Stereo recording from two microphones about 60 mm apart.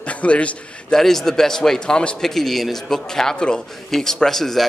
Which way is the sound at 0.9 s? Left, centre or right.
Centre.